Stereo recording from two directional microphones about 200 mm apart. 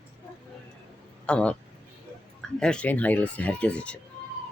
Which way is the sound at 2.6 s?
5° left (ahead or behind).